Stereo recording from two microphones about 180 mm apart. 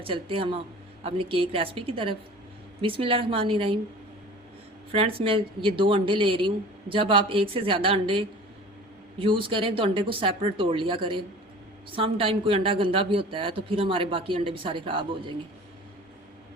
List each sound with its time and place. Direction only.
0.0 s a woman's voice: 30° right (ahead or behind)
4.9 s speech: 30° right (ahead or behind)